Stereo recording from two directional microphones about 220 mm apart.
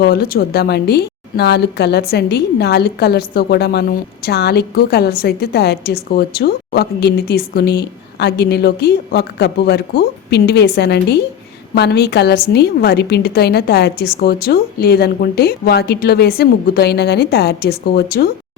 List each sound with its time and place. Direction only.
0.0 s a woman's voice: 45° left (ahead or behind)